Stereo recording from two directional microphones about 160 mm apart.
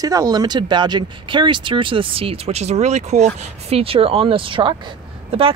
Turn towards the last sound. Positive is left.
turn(degrees=-35)  # may be behind; listen again after turning